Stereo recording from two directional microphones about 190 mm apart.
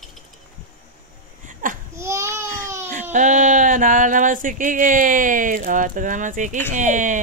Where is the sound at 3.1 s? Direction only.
40° right (ahead or behind).